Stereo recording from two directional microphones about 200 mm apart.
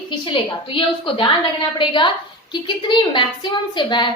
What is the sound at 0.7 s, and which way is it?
A woman's voice, 25° left (ahead or behind).